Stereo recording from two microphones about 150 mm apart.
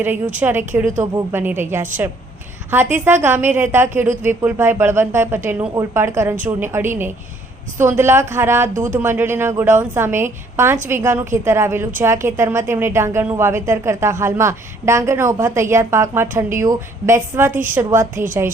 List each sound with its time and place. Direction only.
0.3 s a woman's voice: 15° right (ahead or behind)